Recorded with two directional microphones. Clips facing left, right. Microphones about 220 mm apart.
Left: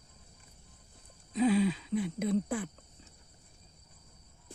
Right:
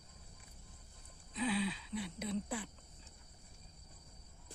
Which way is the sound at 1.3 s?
45° left (ahead or behind).